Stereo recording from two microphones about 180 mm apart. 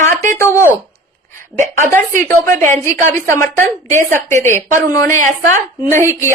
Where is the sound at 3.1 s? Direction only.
15° left (ahead or behind).